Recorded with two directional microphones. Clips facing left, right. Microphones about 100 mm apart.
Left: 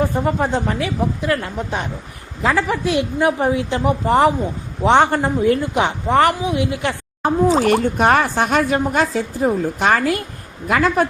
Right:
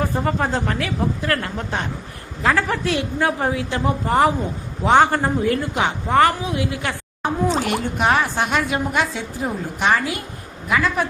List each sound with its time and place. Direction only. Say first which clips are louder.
0.1 s a woman's voice: left 2 dB; 15° left (ahead or behind)
7.6 s a woman's voice: left 6 dB; 45° left (ahead or behind)